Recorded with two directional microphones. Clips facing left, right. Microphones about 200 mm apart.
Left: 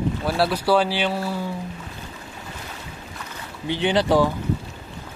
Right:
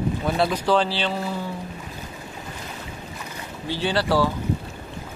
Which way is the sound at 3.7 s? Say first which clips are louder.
Left 3 dB; 20° left (ahead or behind).